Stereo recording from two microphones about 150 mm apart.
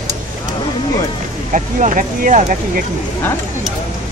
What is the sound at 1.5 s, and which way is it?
Speech, 55° right (ahead or behind).